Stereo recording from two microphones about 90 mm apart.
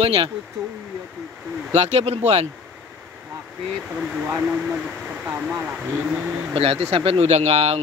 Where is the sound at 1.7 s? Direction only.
90° right.